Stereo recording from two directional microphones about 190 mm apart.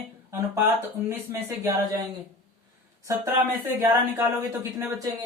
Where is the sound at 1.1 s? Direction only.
15° right (ahead or behind).